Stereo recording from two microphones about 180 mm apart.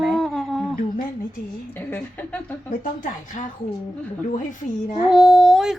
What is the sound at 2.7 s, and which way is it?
Speech, 45° left (ahead or behind).